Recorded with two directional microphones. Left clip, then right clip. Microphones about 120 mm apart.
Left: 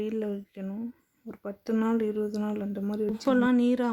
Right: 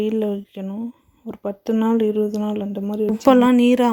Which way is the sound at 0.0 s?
35° right (ahead or behind).